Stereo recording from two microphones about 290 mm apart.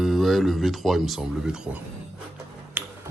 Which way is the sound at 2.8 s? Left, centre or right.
Centre.